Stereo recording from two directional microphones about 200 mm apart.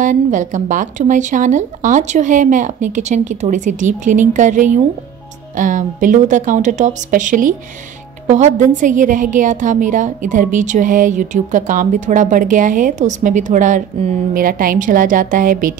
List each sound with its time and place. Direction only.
0.0 s a woman's voice: 40° right (ahead or behind)